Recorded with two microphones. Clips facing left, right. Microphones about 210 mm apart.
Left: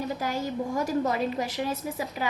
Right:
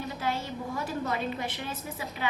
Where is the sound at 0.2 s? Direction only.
40° left (ahead or behind).